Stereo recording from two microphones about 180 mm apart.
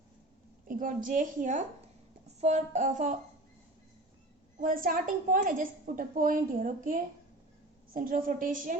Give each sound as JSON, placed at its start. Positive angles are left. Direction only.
{"t": 0.7, "sound": "a woman's voice", "side_deg": -50}
{"t": 4.6, "sound": "a woman's voice", "side_deg": -50}